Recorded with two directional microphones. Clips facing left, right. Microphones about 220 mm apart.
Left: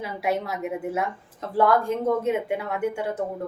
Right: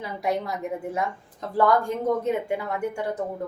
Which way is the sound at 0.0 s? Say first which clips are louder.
Left 1 dB; 5° left (ahead or behind).